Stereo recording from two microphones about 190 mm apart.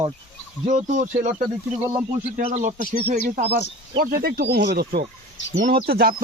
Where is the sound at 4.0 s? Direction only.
50° right (ahead or behind).